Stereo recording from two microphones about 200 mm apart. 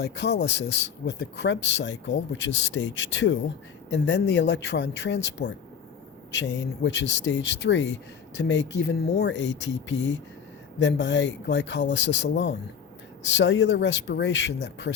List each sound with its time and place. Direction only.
0.0 s speech: 55° left (ahead or behind)